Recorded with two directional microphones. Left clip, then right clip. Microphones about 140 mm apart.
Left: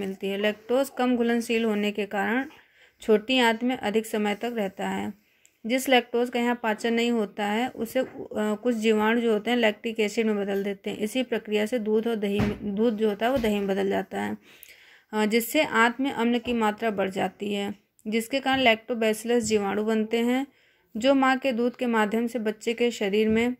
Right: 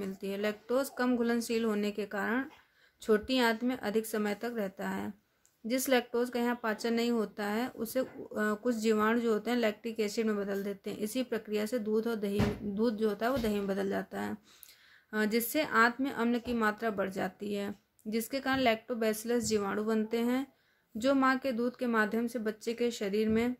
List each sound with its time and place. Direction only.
0.0 s speech: 15° left (ahead or behind)